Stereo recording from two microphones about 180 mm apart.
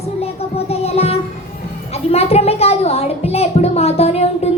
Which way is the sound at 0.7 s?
35° left (ahead or behind).